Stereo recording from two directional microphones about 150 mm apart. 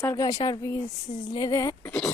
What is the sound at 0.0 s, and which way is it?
Speech, 25° left (ahead or behind).